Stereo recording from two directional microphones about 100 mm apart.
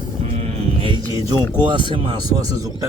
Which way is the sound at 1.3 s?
20° left (ahead or behind).